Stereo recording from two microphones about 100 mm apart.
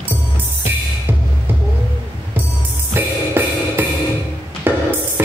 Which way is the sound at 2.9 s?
20° right (ahead or behind).